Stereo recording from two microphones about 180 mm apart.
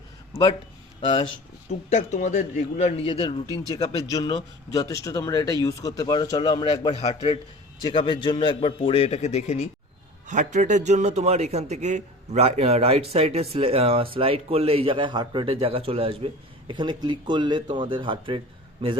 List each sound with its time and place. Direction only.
1.0 s speech: 30° left (ahead or behind)
1.9 s a man's voice: 40° left (ahead or behind)
3.4 s speech: 20° right (ahead or behind)
3.7 s speech: 25° left (ahead or behind)
10.2 s a man's voice: 45° right (ahead or behind)